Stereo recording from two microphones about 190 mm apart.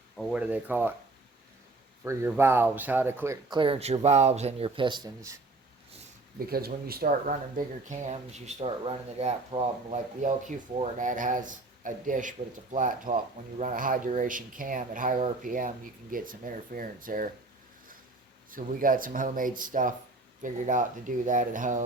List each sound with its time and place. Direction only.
0.2 s speech: 5° right (ahead or behind)
2.0 s speech: 10° right (ahead or behind)
3.5 s speech: 25° right (ahead or behind)
6.5 s speech: 55° right (ahead or behind)
18.5 s speech: 45° right (ahead or behind)